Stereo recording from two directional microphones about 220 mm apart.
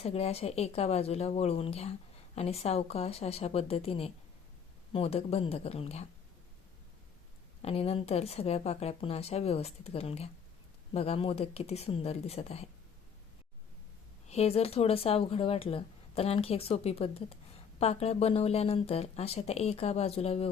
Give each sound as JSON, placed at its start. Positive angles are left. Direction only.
{"t": 0.0, "sound": "speech", "side_deg": 30}
{"t": 7.6, "sound": "speech", "side_deg": 25}
{"t": 14.3, "sound": "speech", "side_deg": 30}